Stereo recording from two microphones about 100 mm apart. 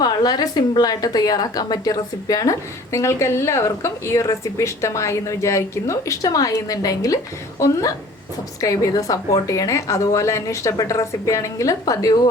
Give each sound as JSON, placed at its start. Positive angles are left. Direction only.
{"t": 0.0, "sound": "a woman's voice", "side_deg": 40}